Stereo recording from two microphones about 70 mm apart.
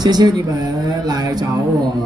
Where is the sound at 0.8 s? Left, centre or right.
Right.